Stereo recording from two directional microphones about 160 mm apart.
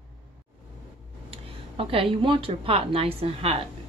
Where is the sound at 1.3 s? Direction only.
35° right (ahead or behind).